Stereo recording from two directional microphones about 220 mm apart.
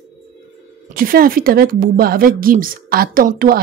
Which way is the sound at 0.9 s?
40° right (ahead or behind).